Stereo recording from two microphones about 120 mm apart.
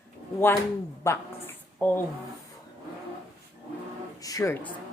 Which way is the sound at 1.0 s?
20° left (ahead or behind).